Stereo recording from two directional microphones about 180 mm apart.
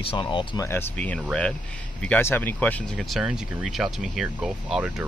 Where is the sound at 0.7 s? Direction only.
10° left (ahead or behind).